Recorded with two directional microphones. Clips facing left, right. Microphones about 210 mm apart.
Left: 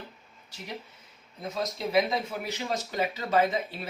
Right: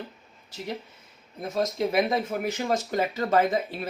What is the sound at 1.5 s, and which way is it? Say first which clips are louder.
Speech: right 2 dB; 50° right (ahead or behind).